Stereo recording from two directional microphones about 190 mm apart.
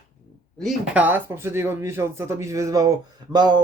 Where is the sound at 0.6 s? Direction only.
5° right (ahead or behind).